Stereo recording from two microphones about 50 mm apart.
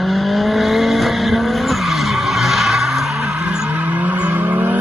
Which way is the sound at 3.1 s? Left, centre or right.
Right.